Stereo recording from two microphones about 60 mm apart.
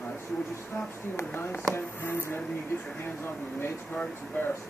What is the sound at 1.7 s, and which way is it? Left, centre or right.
Speech, left.